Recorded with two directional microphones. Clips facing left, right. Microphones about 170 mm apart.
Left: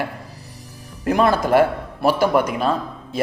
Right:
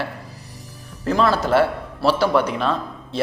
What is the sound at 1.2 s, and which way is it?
Speech, 50° left (ahead or behind).